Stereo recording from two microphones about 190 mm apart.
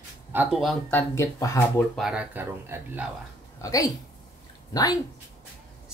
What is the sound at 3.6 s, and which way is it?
Speech, 15° left (ahead or behind).